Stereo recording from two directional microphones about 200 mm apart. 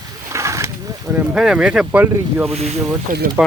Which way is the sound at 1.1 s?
5° right (ahead or behind).